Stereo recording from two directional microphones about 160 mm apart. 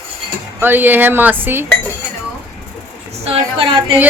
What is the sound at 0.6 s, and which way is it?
A man's voice, 10° right (ahead or behind).